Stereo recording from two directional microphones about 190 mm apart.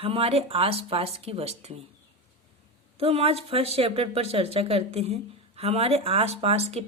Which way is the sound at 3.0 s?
30° right (ahead or behind).